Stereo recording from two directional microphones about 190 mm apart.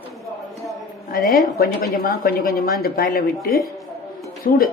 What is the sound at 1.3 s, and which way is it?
Speech, 50° left (ahead or behind).